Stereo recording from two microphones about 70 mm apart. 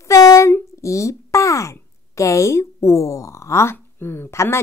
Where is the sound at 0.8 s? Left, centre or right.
Left.